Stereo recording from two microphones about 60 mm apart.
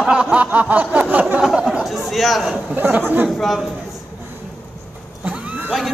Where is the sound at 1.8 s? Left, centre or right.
Centre.